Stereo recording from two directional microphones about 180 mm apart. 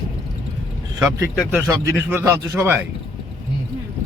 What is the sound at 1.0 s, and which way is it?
Speech, 15° right (ahead or behind).